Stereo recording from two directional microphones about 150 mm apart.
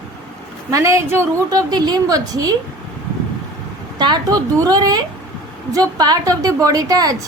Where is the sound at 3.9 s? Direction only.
30° right (ahead or behind).